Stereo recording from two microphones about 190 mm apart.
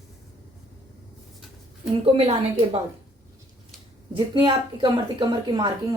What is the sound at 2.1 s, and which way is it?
Speech, 35° right (ahead or behind).